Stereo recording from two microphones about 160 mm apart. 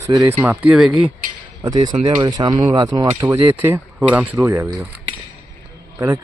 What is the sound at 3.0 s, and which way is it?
Speech, 15° right (ahead or behind).